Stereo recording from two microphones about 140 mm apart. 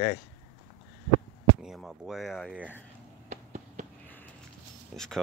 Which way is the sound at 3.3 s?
60° right (ahead or behind).